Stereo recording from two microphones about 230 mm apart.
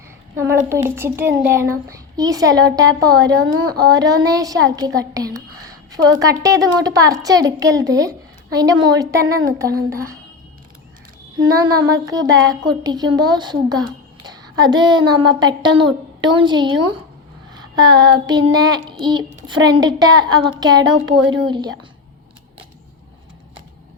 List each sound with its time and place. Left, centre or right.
0.3 s child singing: centre
5.9 s a woman's voice: centre
6.4 s child singing: centre
11.8 s child singing: centre
14.3 s speech: centre
17.5 s child singing: centre